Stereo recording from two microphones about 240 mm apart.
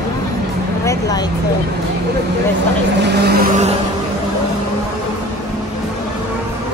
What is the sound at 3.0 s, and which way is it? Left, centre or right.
Vehicle, right.